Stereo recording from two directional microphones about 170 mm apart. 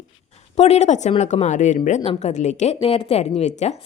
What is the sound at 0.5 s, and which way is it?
A woman's voice, 40° left (ahead or behind).